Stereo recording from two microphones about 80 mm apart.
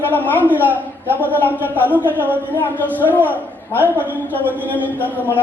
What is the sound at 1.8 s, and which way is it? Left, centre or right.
Speech, right.